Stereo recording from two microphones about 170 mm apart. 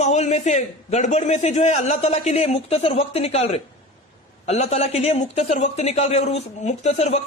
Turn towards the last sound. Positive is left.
turn(degrees=40)  # may be behind; listen again after turning